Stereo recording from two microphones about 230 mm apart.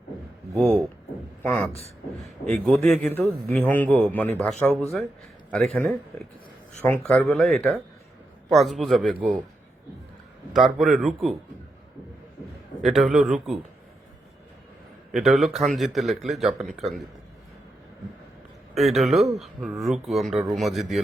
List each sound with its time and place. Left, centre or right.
1.4 s a man's voice: centre
1.7 s speech: left
2.5 s a man's voice: centre
10.5 s speech: centre
12.8 s speech: centre
15.1 s speech: centre
18.7 s speech: centre